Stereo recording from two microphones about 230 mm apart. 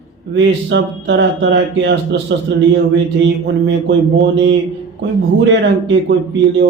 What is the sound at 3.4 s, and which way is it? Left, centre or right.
Speech, right.